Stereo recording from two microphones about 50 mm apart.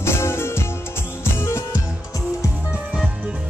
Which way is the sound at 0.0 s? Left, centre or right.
Left.